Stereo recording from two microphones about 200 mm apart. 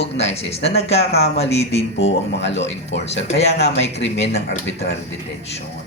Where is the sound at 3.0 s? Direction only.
30° left (ahead or behind).